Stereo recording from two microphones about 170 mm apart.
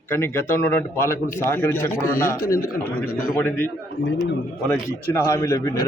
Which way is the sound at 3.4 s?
10° left (ahead or behind).